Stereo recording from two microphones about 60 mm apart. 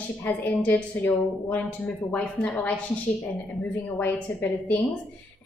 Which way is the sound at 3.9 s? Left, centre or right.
Left.